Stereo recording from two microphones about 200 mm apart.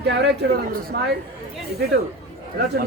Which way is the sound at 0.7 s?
50° right (ahead or behind).